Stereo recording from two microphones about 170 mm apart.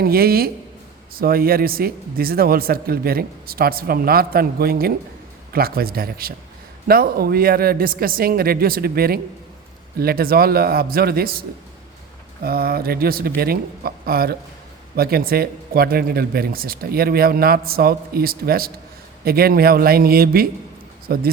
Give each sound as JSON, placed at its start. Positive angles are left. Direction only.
{"t": 0.0, "sound": "speech", "side_deg": -65}